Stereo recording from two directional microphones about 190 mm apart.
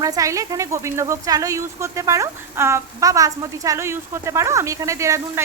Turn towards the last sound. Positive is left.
turn(degrees=-15)  # may be behind; listen again after turning